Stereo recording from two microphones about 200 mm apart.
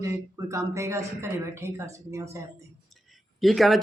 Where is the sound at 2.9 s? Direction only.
Centre (ahead or behind).